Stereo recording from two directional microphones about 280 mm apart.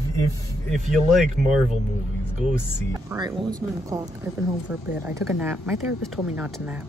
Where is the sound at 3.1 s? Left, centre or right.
Centre.